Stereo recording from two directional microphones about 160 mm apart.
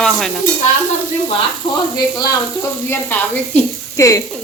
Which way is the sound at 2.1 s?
25° left (ahead or behind).